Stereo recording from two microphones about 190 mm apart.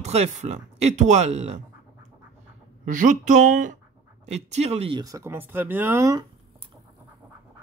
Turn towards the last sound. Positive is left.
turn(degrees=-15)  # may be behind; listen again after turning